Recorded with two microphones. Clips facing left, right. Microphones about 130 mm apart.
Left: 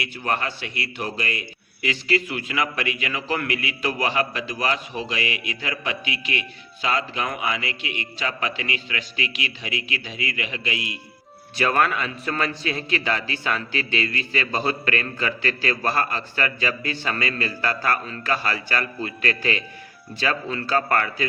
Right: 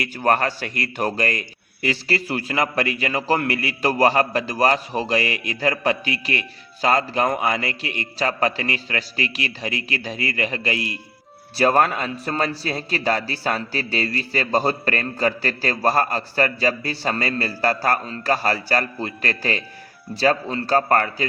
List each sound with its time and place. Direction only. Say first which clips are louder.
0.0 s a man's voice: right 6 dB; 45° right (ahead or behind)